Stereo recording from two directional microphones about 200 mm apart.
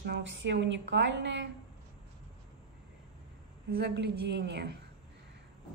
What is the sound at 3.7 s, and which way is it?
Speech, 55° right (ahead or behind).